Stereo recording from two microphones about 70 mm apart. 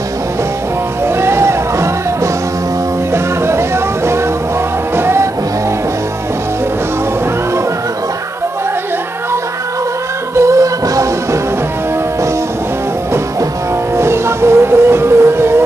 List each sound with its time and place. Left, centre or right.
1.0 s music: right
3.1 s music: right
10.3 s music: right
13.9 s music: right